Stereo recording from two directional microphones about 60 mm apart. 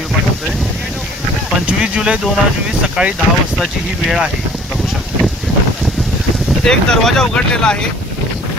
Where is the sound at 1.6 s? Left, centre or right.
Centre.